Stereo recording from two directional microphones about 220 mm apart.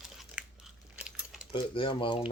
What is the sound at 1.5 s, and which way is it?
Speech, 25° left (ahead or behind).